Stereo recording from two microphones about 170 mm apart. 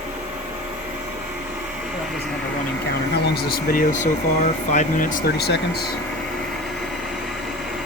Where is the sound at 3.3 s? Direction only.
60° left (ahead or behind).